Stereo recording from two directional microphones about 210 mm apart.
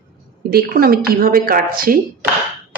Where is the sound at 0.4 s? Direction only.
45° right (ahead or behind).